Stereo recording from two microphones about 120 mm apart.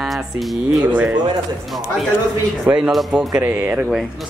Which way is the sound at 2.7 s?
Centre (ahead or behind).